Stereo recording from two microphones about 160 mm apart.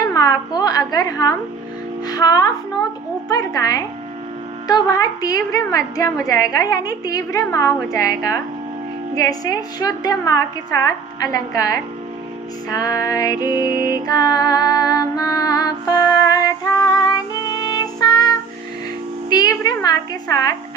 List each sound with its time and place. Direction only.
0.1 s a woman's voice: 20° left (ahead or behind)
14.1 s music: 20° left (ahead or behind)
19.3 s a woman's voice: 25° left (ahead or behind)